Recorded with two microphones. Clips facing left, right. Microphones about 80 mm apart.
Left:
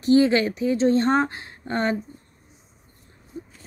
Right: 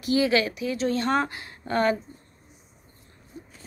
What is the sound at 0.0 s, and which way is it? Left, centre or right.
A woman's voice, left.